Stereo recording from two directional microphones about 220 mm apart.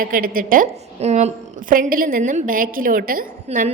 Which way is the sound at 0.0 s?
40° right (ahead or behind).